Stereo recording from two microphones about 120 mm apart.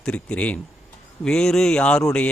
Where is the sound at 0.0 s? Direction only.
10° left (ahead or behind).